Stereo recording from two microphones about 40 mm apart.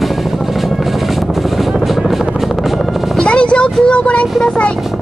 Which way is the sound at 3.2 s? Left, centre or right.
Left.